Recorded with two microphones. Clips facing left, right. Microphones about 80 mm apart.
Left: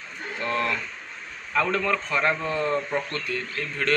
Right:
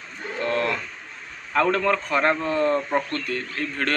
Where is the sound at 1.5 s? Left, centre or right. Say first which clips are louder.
Right 3 dB; right.